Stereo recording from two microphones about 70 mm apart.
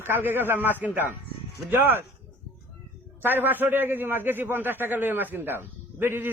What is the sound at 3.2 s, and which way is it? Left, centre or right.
A man's voice, right.